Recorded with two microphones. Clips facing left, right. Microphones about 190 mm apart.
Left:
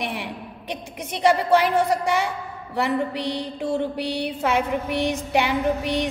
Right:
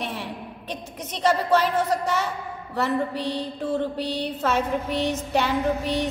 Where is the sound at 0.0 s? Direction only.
15° left (ahead or behind).